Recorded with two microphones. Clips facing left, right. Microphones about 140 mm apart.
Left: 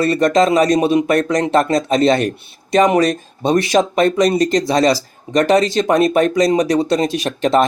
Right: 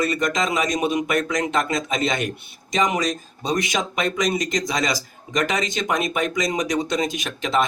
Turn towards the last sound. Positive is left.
turn(degrees=35)  # may be behind; listen again after turning